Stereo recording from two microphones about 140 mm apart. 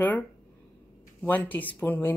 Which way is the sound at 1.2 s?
10° left (ahead or behind).